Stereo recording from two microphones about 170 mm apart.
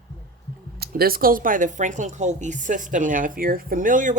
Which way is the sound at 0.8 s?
60° right (ahead or behind).